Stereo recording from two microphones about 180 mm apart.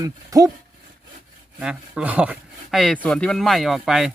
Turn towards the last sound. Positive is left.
turn(degrees=-5)  # may be behind; listen again after turning